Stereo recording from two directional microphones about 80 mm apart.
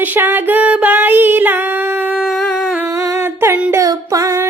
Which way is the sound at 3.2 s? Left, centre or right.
Right.